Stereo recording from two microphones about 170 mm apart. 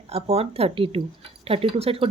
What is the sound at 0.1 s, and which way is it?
Speech, 40° right (ahead or behind).